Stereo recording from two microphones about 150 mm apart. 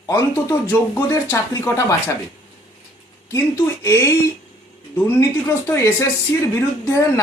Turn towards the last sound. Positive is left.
turn(degrees=20)  # may be behind; listen again after turning